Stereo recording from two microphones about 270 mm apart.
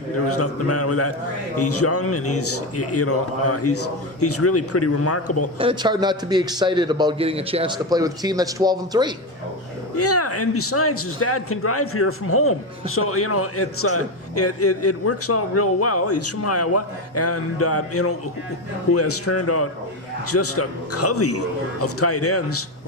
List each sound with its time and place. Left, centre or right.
0.3 s a man's voice: left
5.5 s a man's voice: centre
9.9 s a man's voice: left